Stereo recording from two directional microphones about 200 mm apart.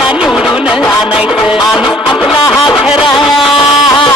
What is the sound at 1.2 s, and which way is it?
Music, 5° right (ahead or behind).